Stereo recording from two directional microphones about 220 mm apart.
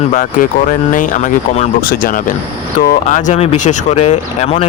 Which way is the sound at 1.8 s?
40° left (ahead or behind).